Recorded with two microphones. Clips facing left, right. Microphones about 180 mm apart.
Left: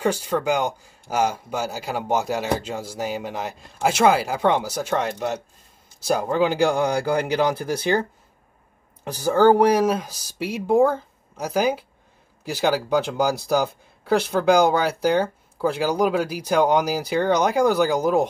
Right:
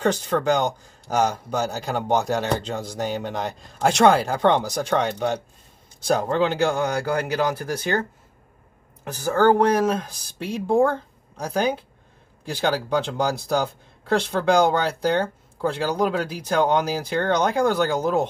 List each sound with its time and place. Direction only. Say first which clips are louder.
0.0 s speech: right 1 dB; 10° left (ahead or behind)
9.2 s speech: left 2 dB; 15° left (ahead or behind)